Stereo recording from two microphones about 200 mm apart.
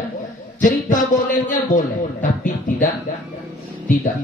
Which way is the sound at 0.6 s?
40° left (ahead or behind).